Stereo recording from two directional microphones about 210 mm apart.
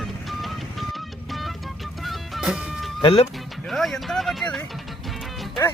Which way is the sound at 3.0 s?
30° left (ahead or behind).